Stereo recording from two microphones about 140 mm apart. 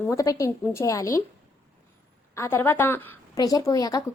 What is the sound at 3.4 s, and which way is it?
Speech, 25° left (ahead or behind).